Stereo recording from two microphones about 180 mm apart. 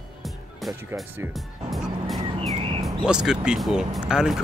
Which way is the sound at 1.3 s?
Centre (ahead or behind).